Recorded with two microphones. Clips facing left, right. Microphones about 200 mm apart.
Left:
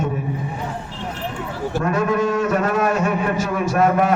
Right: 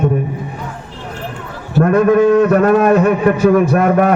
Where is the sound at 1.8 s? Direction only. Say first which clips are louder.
Right 10 dB; 55° right (ahead or behind).